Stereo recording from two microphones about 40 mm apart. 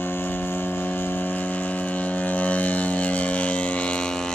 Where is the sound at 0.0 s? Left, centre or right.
Left.